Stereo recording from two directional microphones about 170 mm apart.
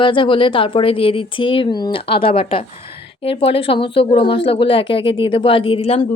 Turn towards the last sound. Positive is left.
turn(degrees=35)  # may be behind; listen again after turning